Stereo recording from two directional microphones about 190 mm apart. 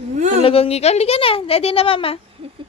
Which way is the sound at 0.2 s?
40° right (ahead or behind).